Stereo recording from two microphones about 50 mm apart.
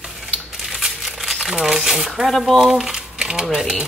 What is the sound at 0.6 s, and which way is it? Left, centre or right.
Crumpling, centre.